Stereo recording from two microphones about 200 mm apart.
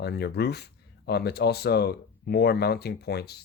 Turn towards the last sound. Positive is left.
turn(degrees=55)  # may be behind; listen again after turning